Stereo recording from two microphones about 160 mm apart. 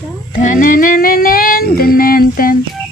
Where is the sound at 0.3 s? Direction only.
55° left (ahead or behind).